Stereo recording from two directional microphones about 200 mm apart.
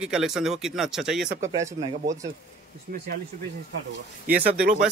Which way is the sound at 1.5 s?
20° right (ahead or behind).